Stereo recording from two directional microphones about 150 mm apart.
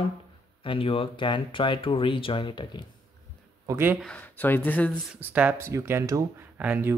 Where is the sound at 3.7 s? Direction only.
15° right (ahead or behind).